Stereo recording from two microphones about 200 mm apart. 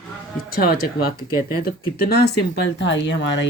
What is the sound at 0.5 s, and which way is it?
Speech, 45° left (ahead or behind).